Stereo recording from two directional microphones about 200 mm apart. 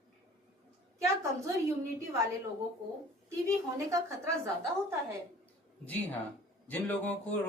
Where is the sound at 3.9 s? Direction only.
15° right (ahead or behind).